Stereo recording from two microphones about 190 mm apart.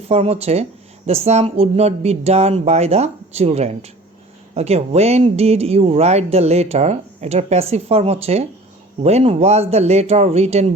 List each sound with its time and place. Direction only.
0.1 s speech: 30° right (ahead or behind)